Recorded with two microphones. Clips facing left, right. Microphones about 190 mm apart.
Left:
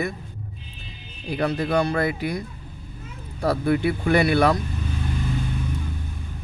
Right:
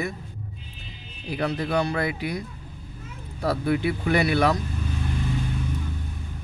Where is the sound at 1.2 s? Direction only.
45° left (ahead or behind).